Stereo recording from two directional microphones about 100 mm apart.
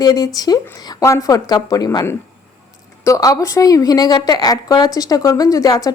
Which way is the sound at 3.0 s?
35° left (ahead or behind).